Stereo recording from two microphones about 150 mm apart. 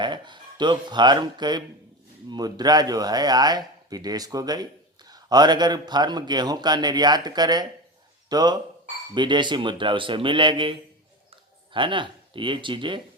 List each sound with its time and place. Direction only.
0.0 s speech: 30° right (ahead or behind)